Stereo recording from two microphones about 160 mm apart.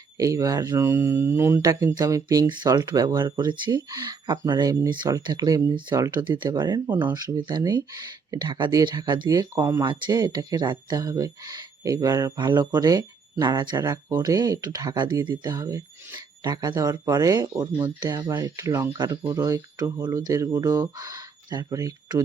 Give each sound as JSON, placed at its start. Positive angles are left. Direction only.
{"t": 0.2, "sound": "speech", "side_deg": -20}
{"t": 9.6, "sound": "speech", "side_deg": -15}
{"t": 9.8, "sound": "speech", "side_deg": -25}